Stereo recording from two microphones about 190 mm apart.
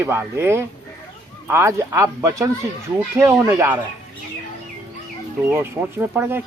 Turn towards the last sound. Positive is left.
turn(degrees=-10)  # may be behind; listen again after turning